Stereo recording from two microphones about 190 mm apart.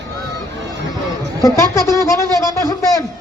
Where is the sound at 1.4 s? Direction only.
15° left (ahead or behind).